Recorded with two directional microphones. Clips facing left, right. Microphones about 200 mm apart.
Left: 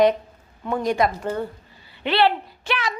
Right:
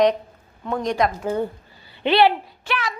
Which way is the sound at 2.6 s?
20° left (ahead or behind).